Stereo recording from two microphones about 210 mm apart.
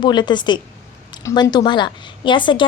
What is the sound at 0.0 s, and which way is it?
A woman's voice, 20° left (ahead or behind).